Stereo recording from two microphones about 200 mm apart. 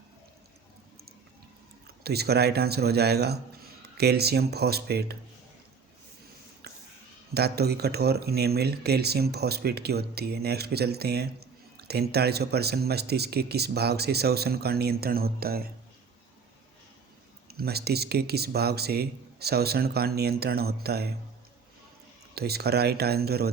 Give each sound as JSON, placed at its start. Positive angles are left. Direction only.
{"t": 2.0, "sound": "speech", "side_deg": -55}
{"t": 6.6, "sound": "a sound", "side_deg": -55}
{"t": 7.3, "sound": "speech", "side_deg": -55}
{"t": 17.5, "sound": "speech", "side_deg": -50}
{"t": 22.4, "sound": "speech", "side_deg": -50}